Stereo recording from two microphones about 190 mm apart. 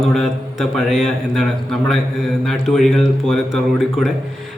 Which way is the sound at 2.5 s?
Centre (ahead or behind).